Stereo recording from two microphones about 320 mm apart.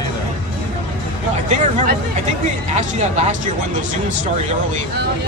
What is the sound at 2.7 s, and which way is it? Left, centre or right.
Speech, right.